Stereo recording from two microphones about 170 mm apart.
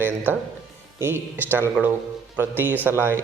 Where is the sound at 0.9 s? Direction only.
15° right (ahead or behind).